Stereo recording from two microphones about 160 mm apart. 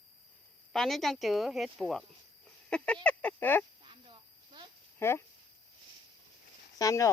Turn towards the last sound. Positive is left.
turn(degrees=20)  # may be behind; listen again after turning